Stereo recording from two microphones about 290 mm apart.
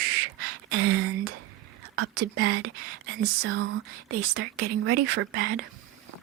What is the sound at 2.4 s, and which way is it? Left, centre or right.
Speech, right.